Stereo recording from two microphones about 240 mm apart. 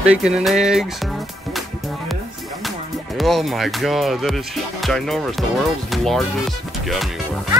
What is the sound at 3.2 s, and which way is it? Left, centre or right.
Speech, centre.